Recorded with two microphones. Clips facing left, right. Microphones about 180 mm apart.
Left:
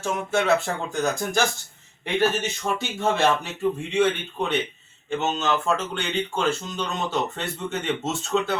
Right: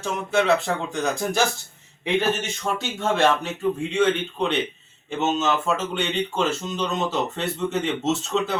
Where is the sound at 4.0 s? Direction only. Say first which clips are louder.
Right 1 dB; 5° left (ahead or behind).